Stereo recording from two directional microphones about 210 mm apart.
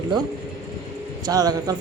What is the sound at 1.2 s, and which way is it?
Speech, 20° right (ahead or behind).